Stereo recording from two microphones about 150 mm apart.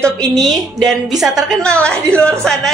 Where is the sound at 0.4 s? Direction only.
Centre (ahead or behind).